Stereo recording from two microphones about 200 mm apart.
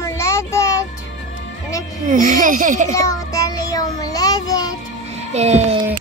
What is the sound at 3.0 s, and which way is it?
Child singing, 15° left (ahead or behind).